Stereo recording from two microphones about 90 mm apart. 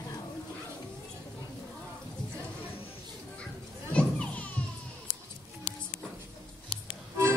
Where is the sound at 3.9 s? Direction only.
15° left (ahead or behind).